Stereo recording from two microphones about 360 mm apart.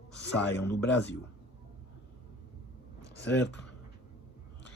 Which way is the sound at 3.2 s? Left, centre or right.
Left.